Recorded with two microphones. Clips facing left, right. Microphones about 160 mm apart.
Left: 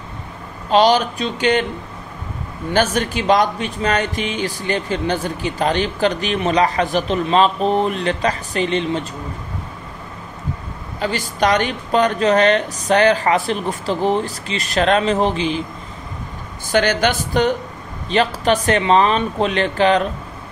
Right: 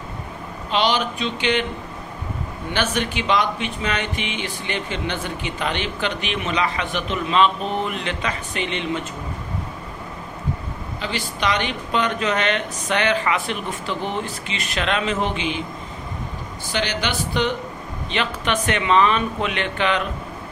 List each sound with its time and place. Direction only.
0.7 s speech: 40° left (ahead or behind)
2.7 s speech: 40° left (ahead or behind)
11.0 s speech: 45° left (ahead or behind)
16.7 s a woman's voice: 45° left (ahead or behind)